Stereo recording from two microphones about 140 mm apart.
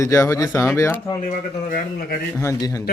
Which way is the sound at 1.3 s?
80° left.